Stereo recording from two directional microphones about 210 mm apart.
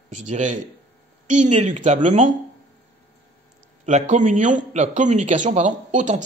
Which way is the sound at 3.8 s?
35° right (ahead or behind).